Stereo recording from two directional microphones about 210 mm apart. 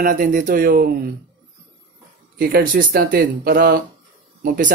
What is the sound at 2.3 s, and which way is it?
Speech, 45° right (ahead or behind).